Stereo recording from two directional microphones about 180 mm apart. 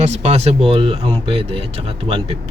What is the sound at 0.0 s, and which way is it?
Speech, 35° right (ahead or behind).